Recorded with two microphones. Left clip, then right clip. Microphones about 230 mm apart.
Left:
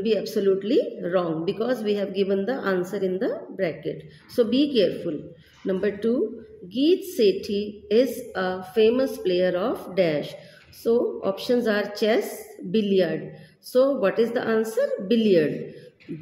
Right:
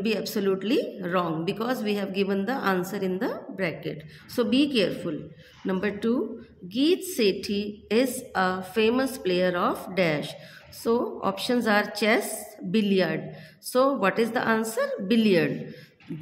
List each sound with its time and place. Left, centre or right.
0.0 s a woman's voice: right